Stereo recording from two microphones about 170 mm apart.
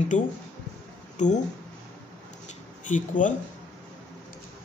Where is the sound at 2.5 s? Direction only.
45° left (ahead or behind).